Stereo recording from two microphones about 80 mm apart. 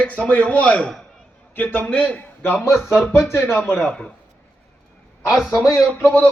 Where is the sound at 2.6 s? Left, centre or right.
Left.